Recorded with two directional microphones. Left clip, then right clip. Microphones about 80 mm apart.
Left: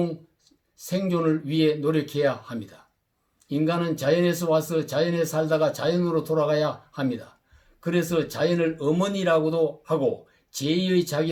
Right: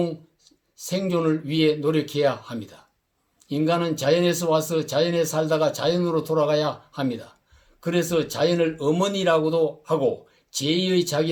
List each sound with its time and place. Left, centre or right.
0.9 s speech: right